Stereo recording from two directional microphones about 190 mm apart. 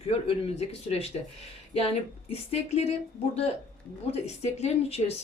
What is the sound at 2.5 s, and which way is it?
Speech, 35° left (ahead or behind).